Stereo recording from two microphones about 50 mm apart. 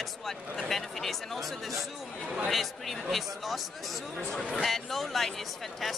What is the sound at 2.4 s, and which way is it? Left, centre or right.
Speech, centre.